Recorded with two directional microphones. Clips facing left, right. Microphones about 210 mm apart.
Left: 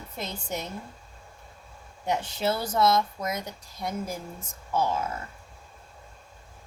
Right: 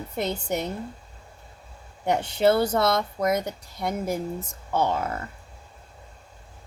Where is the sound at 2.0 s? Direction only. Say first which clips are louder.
Right 7 dB; 60° right (ahead or behind).